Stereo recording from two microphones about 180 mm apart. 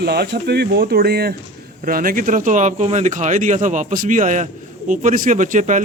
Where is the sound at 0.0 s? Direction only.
60° right (ahead or behind).